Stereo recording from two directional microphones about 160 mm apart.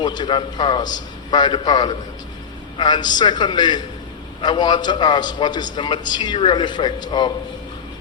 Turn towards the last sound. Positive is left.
turn(degrees=25)  # may be behind; listen again after turning